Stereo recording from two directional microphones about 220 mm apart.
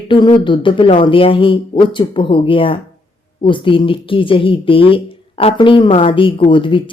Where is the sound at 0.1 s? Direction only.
20° left (ahead or behind).